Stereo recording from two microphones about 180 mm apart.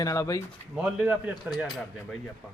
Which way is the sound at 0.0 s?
20° left (ahead or behind).